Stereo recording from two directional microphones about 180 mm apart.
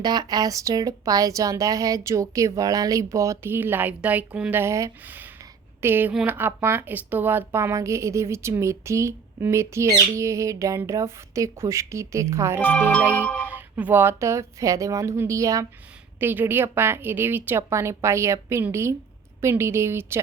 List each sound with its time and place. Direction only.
0.0 s a woman's voice: 20° right (ahead or behind)
12.6 s music: 10° left (ahead or behind)
13.5 s a woman's voice: 10° right (ahead or behind)